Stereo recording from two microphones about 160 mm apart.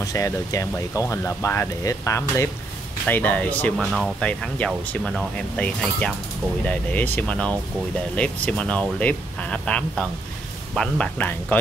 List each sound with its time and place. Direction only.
0.0 s speech: 20° left (ahead or behind)